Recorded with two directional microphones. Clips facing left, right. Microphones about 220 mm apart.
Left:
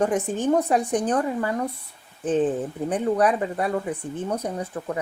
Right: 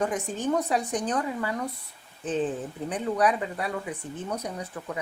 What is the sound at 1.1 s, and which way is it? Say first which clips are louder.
Speech: left 5 dB; 40° left (ahead or behind).